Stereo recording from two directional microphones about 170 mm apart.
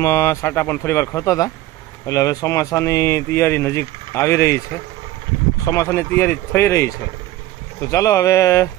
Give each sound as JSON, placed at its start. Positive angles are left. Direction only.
{"t": 0.0, "sound": "speech", "side_deg": 15}
{"t": 5.7, "sound": "speech", "side_deg": 15}